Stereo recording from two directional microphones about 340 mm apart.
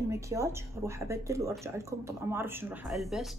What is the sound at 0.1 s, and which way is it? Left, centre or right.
A woman's voice, centre.